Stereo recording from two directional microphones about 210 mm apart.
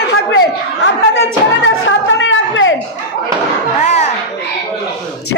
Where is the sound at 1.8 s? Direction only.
65° left (ahead or behind).